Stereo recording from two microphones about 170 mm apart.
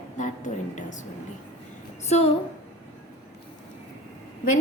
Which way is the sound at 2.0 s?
40° left (ahead or behind).